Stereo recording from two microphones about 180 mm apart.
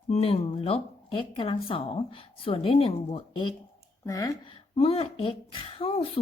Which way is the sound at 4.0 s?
20° left (ahead or behind).